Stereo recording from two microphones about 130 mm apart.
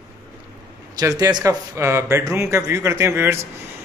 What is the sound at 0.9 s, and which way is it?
Speech, 30° right (ahead or behind).